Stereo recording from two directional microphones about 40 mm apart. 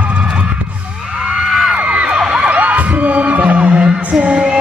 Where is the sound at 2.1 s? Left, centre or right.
Centre.